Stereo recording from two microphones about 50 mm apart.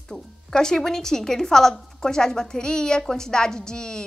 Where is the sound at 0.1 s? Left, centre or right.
Centre.